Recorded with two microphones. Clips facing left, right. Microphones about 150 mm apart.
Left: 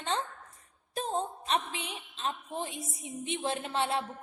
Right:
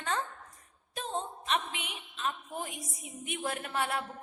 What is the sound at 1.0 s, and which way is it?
A woman's voice, 35° left (ahead or behind).